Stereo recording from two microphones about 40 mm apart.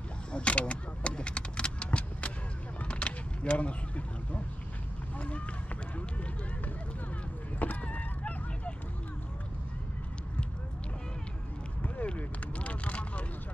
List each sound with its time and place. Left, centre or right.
0.3 s vehicle: left
7.5 s a sound: left
12.5 s vehicle: left